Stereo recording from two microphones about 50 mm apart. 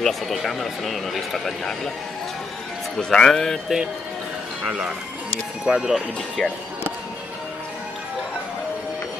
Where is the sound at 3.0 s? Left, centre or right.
Centre.